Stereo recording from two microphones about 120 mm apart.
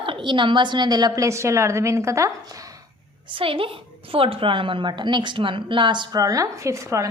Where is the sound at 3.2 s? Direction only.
45° right (ahead or behind); by 7.1 s 25° right (ahead or behind).